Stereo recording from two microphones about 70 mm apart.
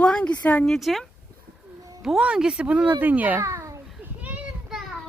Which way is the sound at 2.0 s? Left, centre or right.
Centre.